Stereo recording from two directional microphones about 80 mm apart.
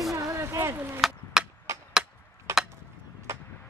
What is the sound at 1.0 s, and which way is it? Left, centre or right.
Chop, centre.